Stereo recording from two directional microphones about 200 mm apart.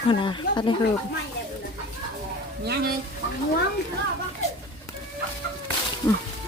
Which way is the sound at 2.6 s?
55° right (ahead or behind).